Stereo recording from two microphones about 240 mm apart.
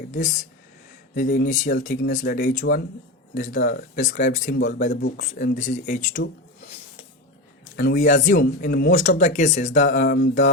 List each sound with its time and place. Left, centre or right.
0.1 s speech: left
4.9 s speech: left
5.3 s speech: left
7.8 s speech: left